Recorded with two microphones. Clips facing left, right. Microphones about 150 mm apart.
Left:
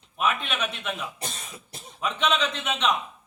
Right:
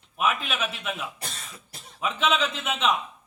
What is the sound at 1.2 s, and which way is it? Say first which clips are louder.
Cough: left 3 dB; 20° left (ahead or behind).